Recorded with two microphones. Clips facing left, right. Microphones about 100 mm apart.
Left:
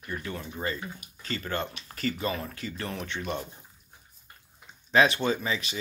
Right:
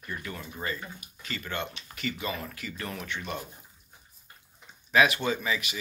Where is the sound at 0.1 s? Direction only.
30° left (ahead or behind).